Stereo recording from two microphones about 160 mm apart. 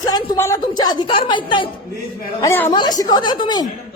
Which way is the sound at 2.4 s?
15° left (ahead or behind).